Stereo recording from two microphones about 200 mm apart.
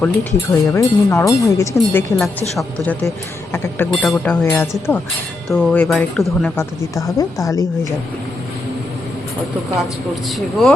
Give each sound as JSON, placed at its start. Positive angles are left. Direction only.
{"t": 0.0, "sound": "speech", "side_deg": 10}